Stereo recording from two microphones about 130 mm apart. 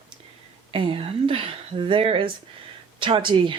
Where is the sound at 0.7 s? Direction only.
45° right (ahead or behind).